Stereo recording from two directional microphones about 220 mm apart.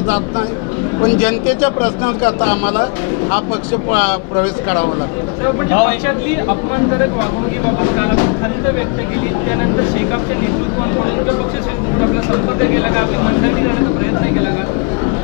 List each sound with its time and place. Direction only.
1.0 s speech: 10° left (ahead or behind)
3.9 s speech: 10° left (ahead or behind)
12.0 s speech: 20° left (ahead or behind)